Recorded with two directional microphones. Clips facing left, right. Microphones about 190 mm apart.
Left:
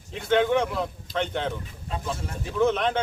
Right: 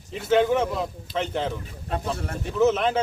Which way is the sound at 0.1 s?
5° right (ahead or behind).